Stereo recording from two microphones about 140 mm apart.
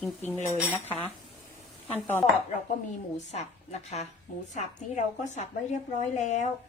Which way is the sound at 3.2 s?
55° left (ahead or behind).